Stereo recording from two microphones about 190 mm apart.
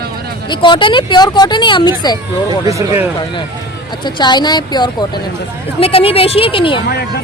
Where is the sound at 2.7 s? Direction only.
15° right (ahead or behind).